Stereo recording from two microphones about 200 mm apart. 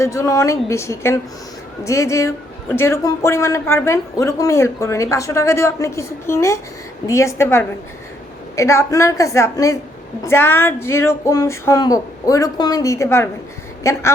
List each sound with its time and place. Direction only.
0.0 s a man's voice: 15° left (ahead or behind)